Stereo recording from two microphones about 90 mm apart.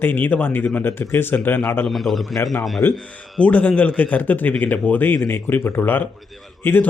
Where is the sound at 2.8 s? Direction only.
25° left (ahead or behind).